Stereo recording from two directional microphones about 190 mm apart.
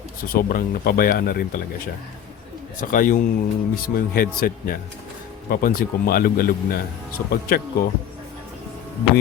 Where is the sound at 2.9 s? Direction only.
45° left (ahead or behind).